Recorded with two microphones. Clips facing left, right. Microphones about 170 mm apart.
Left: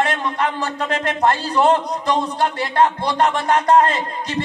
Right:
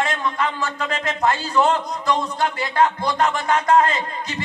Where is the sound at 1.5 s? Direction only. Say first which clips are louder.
Left 3 dB; 30° left (ahead or behind).